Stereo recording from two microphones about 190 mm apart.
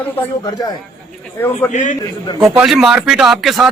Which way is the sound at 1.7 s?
40° left (ahead or behind).